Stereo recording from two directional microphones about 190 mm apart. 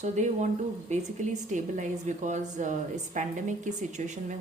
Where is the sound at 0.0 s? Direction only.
40° right (ahead or behind).